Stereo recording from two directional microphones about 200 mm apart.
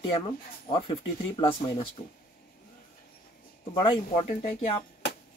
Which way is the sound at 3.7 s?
25° left (ahead or behind).